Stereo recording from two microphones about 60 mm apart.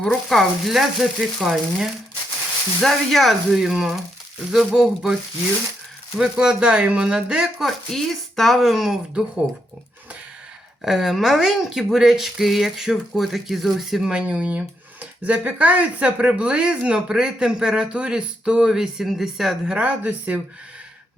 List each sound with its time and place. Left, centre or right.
0.0 s speech: centre
6.1 s speech: centre
7.6 s speech: centre
10.8 s speech: centre
14.1 s speech: centre
19.7 s speech: right